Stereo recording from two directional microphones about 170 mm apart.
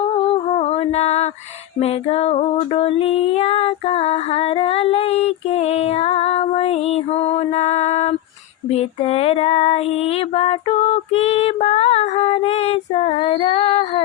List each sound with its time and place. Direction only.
0.5 s female singing: 35° left (ahead or behind)